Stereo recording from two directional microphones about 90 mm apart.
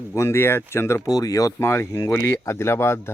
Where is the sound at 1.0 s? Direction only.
45° left (ahead or behind).